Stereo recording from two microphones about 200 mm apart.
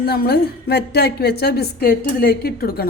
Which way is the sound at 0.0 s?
50° left (ahead or behind).